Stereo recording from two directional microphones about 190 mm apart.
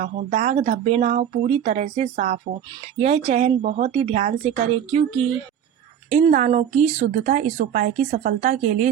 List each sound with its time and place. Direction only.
0.0 s speech: 40° right (ahead or behind)